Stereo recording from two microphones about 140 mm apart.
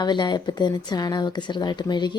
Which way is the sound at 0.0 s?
30° left (ahead or behind).